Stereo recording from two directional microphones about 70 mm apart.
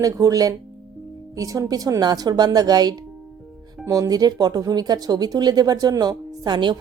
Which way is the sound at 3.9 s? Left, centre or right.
Right.